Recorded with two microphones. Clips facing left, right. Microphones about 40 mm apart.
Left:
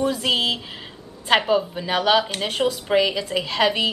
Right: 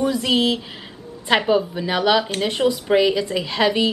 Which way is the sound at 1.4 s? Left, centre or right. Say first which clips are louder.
Right 2 dB; centre.